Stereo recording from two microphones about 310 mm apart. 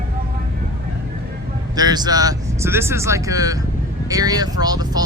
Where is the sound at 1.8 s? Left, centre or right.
Centre.